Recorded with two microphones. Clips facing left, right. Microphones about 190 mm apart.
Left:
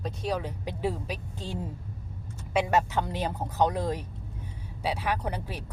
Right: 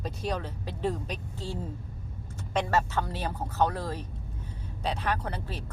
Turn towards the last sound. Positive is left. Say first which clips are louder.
# left 1 dB
turn(degrees=15)  # may be behind; listen again after turning